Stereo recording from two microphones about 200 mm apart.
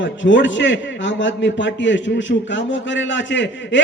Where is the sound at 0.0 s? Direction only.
65° left (ahead or behind).